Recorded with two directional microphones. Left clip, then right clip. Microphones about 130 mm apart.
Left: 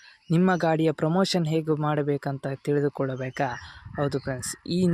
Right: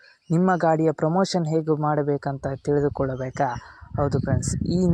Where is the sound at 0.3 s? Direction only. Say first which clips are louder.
Right 3 dB; 25° left (ahead or behind).